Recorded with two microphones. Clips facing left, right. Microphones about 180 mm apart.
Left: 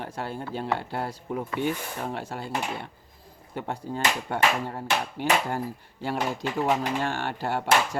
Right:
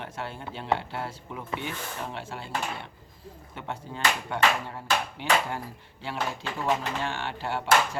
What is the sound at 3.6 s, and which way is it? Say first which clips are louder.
Speech: left 5 dB; 40° left (ahead or behind).